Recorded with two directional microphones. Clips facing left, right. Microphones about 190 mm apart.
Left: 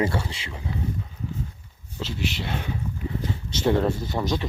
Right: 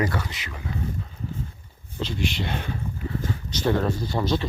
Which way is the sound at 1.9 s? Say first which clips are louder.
Right 2 dB; 5° left (ahead or behind).